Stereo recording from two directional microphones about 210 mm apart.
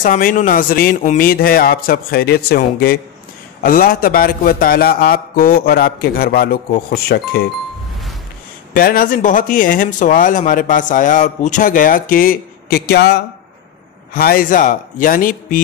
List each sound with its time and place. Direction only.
0.0 s a man's voice: 40° left (ahead or behind)
8.7 s speech: 45° left (ahead or behind)